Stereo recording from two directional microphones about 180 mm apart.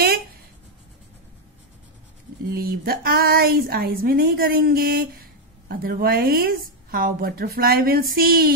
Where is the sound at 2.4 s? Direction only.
55° right (ahead or behind).